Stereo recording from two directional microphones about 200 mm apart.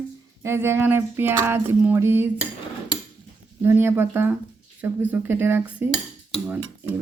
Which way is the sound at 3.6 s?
10° right (ahead or behind).